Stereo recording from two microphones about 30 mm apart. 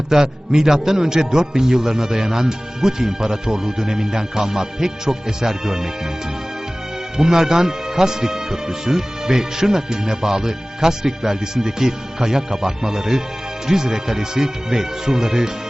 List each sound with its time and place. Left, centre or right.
0.1 s speech: centre
7.2 s speech: centre